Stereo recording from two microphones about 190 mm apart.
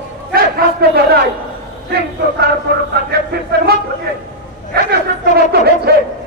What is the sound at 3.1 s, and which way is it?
Speech, 60° right (ahead or behind).